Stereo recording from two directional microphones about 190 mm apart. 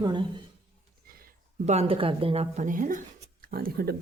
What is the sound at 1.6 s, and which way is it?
Speech, 35° right (ahead or behind).